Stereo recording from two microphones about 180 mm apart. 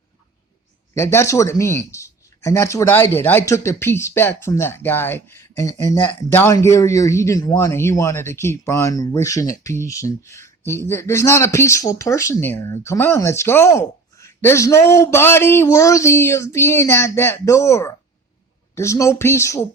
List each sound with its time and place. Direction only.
0.9 s speech: 15° left (ahead or behind)